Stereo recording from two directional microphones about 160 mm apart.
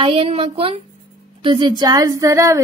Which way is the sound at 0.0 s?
35° right (ahead or behind).